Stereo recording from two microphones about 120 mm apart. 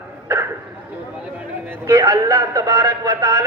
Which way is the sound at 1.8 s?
30° right (ahead or behind).